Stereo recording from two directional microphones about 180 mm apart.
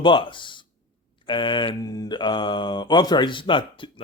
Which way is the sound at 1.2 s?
25° left (ahead or behind).